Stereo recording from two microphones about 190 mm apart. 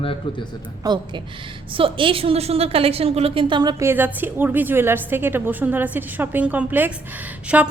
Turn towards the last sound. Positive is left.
turn(degrees=-10)  # may be behind; listen again after turning